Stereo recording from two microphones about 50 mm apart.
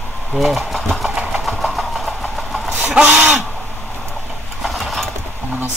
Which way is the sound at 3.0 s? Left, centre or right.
Right.